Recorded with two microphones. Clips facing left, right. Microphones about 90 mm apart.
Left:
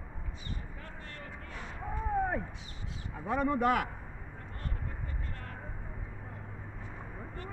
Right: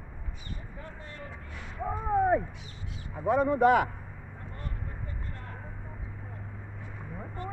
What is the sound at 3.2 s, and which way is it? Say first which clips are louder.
Speech: right 5 dB; 15° right (ahead or behind).